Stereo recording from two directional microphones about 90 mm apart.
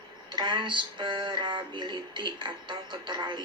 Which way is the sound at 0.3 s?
55° right (ahead or behind).